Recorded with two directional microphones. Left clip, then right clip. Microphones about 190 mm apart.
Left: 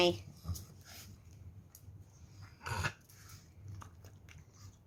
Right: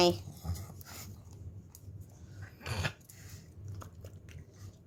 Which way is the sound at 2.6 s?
5° right (ahead or behind).